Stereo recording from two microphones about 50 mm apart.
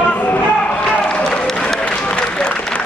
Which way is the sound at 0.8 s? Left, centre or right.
Centre.